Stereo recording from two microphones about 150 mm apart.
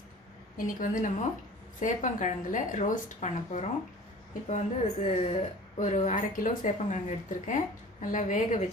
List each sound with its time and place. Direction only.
0.5 s a woman's voice: 65° left (ahead or behind)